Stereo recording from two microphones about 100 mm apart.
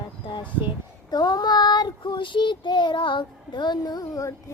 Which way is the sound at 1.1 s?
45° left (ahead or behind).